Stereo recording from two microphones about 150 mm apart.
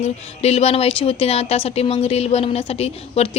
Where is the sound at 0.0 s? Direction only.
45° left (ahead or behind).